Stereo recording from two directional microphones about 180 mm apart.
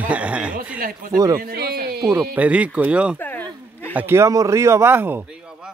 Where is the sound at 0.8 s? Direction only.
50° right (ahead or behind).